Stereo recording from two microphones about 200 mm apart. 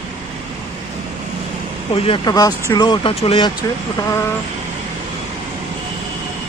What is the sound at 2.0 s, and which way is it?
Speech, 25° left (ahead or behind).